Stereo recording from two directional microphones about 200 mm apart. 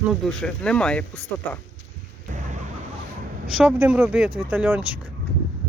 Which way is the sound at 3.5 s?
5° right (ahead or behind).